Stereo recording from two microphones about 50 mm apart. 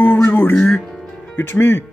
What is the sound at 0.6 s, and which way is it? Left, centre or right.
Speech, centre.